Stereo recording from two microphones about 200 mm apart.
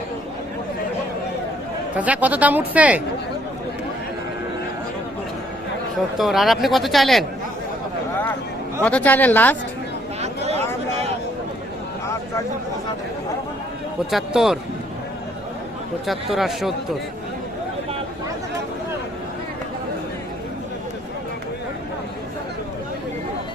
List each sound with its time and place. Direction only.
2.0 s speech: 10° right (ahead or behind)
6.1 s speech: centre (ahead or behind)
8.8 s speech: 5° left (ahead or behind)
10.2 s a sound: 35° right (ahead or behind)
14.1 s speech: centre (ahead or behind)
16.3 s speech: centre (ahead or behind)